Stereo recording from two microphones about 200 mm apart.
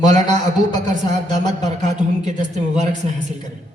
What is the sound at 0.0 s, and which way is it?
A man's voice, 35° right (ahead or behind).